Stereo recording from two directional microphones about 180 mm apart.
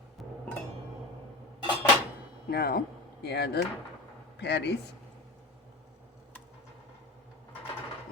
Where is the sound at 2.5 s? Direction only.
60° left (ahead or behind).